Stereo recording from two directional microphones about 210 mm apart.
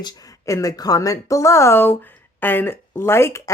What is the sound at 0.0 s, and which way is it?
Speech, 15° left (ahead or behind).